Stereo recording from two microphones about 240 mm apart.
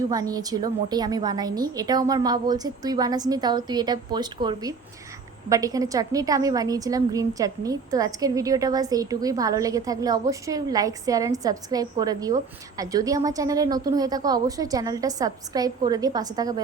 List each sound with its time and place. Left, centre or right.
0.1 s a woman's voice: centre